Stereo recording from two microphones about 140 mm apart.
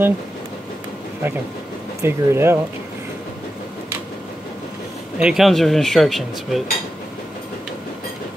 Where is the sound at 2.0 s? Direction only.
15° right (ahead or behind).